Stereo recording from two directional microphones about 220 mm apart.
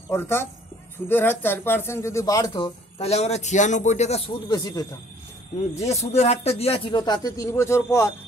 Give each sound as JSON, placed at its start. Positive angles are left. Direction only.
{"t": 0.1, "sound": "speech", "side_deg": 10}
{"t": 4.5, "sound": "speech", "side_deg": 15}
{"t": 5.8, "sound": "speech", "side_deg": 30}